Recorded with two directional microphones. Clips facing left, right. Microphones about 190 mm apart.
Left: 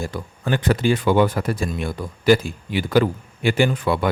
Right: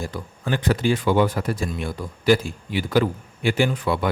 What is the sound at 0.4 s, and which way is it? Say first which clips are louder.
Speech: left 2 dB; 55° left (ahead or behind).